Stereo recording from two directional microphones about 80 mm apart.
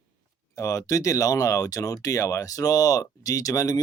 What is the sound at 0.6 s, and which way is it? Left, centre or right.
Speech, left.